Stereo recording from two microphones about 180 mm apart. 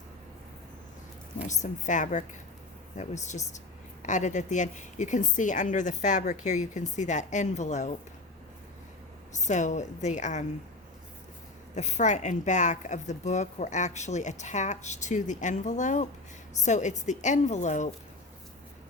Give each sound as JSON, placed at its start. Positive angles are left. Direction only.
{"t": 1.5, "sound": "a woman's voice", "side_deg": 45}
{"t": 9.3, "sound": "a woman's voice", "side_deg": 40}
{"t": 11.7, "sound": "a woman's voice", "side_deg": 40}